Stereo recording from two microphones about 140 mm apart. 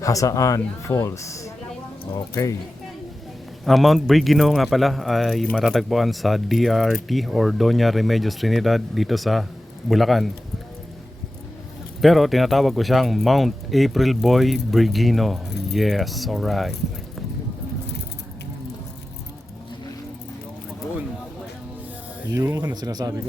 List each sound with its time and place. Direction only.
0.0 s a man's voice: 25° left (ahead or behind)
3.6 s a man's voice: centre (ahead or behind)
12.0 s a man's voice: centre (ahead or behind)
22.5 s speech: 30° right (ahead or behind)